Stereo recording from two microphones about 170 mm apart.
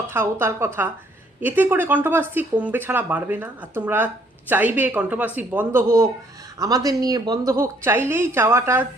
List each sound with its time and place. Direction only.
0.1 s speech: 15° right (ahead or behind)